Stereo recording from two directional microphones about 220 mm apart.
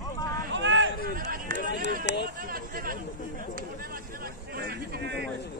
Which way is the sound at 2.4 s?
40° right (ahead or behind).